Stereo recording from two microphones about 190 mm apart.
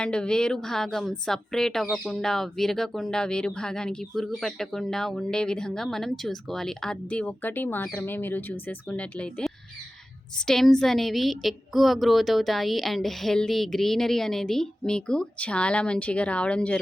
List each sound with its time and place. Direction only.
0.0 s speech: 5° left (ahead or behind)